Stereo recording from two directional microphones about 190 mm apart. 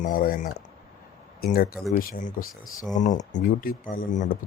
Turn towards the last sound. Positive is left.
turn(degrees=45)  # may be behind; listen again after turning